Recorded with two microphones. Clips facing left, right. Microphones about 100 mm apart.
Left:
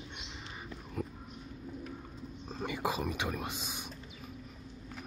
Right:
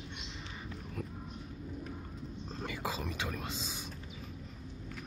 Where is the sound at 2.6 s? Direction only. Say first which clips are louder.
Left 5 dB; 15° left (ahead or behind).